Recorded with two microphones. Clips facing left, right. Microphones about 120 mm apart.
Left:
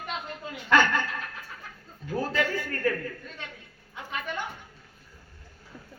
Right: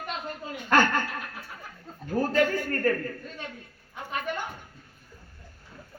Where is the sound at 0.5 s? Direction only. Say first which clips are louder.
Even; 45° right (ahead or behind).